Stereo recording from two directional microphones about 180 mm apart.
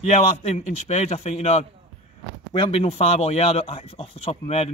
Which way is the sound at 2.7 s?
35° left (ahead or behind).